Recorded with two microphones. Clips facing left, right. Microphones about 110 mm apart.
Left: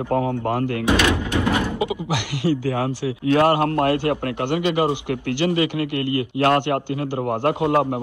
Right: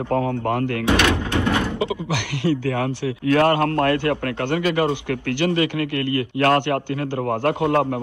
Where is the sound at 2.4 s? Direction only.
30° left (ahead or behind).